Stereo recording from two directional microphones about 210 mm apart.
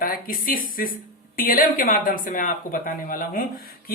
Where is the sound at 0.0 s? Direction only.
45° left (ahead or behind).